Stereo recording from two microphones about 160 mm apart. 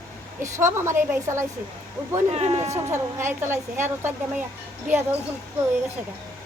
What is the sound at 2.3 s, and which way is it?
Speech, 40° right (ahead or behind).